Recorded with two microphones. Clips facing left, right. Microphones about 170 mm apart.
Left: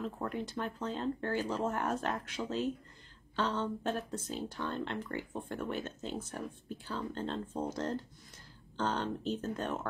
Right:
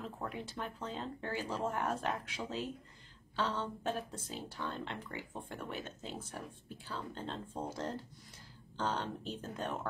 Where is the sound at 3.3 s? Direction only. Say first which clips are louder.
Left 3 dB; 5° right (ahead or behind).